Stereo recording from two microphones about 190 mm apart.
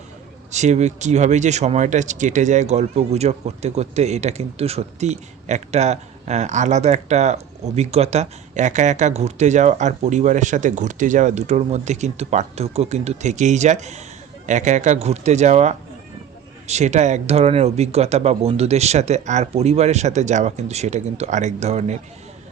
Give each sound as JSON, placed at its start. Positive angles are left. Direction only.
{"t": 0.5, "sound": "speech", "side_deg": -35}